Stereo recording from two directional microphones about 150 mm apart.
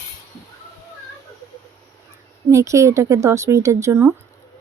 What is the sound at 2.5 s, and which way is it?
Speech, 20° right (ahead or behind).